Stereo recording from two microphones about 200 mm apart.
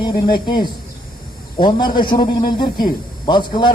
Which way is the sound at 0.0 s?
20° left (ahead or behind).